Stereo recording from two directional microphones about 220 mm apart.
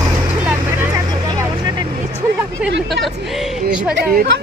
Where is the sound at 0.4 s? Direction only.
10° right (ahead or behind).